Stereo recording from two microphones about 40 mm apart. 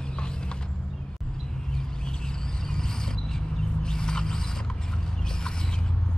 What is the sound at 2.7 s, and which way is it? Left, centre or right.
Mechanisms, centre.